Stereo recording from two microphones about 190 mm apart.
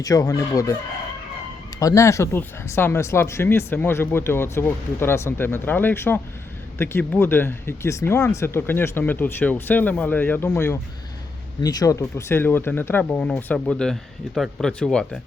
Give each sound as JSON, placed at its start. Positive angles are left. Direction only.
{"t": 0.0, "sound": "chicken", "side_deg": 20}
{"t": 1.8, "sound": "speech", "side_deg": 15}